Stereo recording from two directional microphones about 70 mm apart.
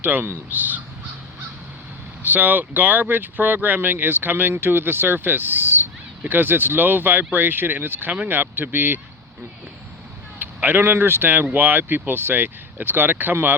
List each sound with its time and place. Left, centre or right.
0.0 s speech: right
2.2 s speech: right
10.4 s a man's voice: right